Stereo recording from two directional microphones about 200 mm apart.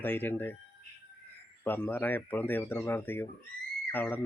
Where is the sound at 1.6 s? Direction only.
10° left (ahead or behind).